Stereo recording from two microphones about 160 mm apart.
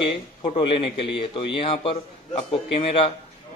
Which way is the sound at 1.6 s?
35° left (ahead or behind).